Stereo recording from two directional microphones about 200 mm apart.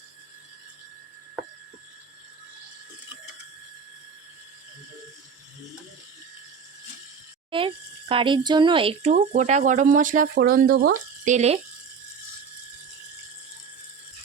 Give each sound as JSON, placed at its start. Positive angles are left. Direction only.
{"t": 7.5, "sound": "speech", "side_deg": -25}
{"t": 11.3, "sound": "speech", "side_deg": -30}